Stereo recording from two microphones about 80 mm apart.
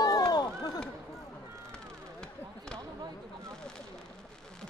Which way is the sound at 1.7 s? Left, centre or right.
Centre.